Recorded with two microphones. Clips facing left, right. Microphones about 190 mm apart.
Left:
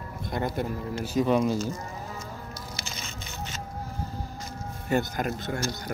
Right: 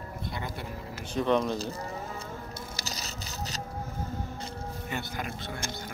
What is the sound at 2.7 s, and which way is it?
Scrape, 40° right (ahead or behind).